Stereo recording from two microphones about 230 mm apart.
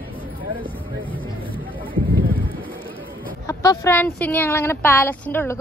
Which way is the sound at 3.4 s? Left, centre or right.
Centre.